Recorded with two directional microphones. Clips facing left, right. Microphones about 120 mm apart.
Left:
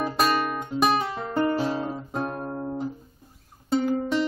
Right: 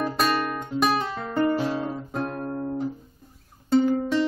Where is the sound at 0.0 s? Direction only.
5° left (ahead or behind).